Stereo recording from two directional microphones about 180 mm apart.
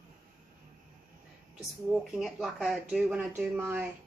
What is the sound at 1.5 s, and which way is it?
Speech, centre (ahead or behind).